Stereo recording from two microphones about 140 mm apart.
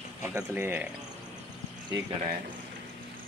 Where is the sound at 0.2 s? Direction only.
15° right (ahead or behind).